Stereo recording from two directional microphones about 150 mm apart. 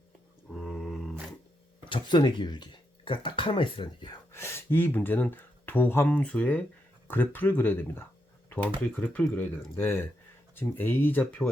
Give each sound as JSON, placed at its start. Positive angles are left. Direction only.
{"t": 0.5, "sound": "mantra", "side_deg": 5}
{"t": 1.8, "sound": "speech", "side_deg": 30}
{"t": 4.3, "sound": "speech", "side_deg": 15}